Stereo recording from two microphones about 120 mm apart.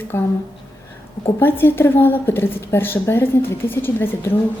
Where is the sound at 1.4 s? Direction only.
20° left (ahead or behind).